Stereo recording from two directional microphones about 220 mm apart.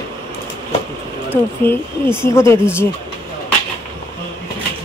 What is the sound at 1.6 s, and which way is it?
A woman's voice, 10° left (ahead or behind).